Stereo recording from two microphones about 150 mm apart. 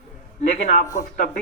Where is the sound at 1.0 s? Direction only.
65° left (ahead or behind).